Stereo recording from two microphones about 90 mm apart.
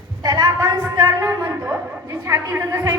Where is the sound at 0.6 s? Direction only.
35° right (ahead or behind).